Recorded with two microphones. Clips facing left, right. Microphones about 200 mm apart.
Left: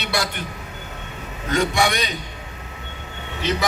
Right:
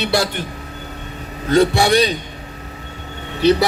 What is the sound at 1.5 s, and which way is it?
Speech, 35° right (ahead or behind).